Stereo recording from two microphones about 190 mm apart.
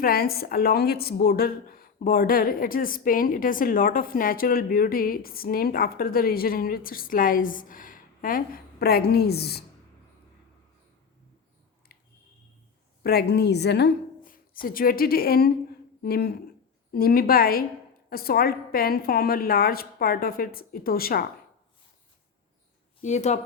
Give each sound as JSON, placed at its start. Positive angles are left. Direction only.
{"t": 0.0, "sound": "a woman's voice", "side_deg": 50}
{"t": 13.0, "sound": "a woman's voice", "side_deg": 55}
{"t": 23.0, "sound": "speech", "side_deg": 35}